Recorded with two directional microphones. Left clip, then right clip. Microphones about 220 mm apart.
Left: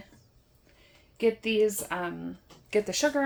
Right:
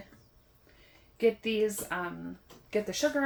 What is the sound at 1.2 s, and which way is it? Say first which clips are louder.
Speech: left 3 dB; 30° left (ahead or behind).